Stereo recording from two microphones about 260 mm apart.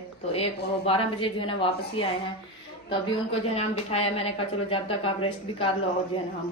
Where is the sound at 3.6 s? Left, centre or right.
Left.